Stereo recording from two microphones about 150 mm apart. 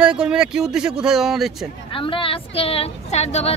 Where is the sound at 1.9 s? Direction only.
35° left (ahead or behind).